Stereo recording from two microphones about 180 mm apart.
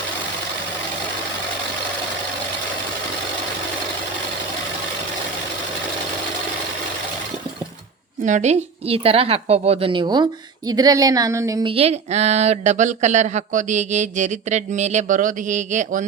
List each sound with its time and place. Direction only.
8.2 s a woman's voice: 40° right (ahead or behind); by 11.7 s 20° right (ahead or behind)
11.7 s speech: 35° right (ahead or behind)